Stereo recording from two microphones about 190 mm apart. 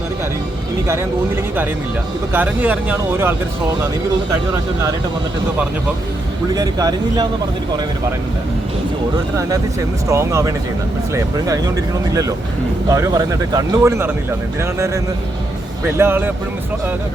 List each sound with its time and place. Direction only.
2.3 s speech: 10° right (ahead or behind)
6.5 s speech: 20° right (ahead or behind)
9.1 s speech: 15° right (ahead or behind)
12.9 s speech: 20° right (ahead or behind)